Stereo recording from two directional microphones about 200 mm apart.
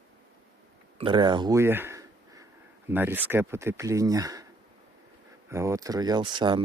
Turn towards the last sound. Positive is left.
turn(degrees=-20)  # may be behind; listen again after turning